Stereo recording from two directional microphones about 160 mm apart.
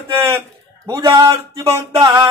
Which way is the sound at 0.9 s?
25° right (ahead or behind).